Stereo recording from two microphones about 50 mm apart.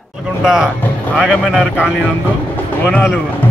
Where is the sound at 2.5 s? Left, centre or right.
Left.